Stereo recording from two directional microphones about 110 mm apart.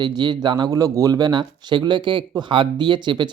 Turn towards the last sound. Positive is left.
turn(degrees=-45)  # may be behind; listen again after turning